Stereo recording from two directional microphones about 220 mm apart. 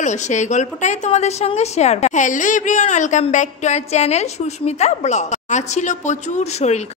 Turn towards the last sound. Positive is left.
turn(degrees=30)  # may be behind; listen again after turning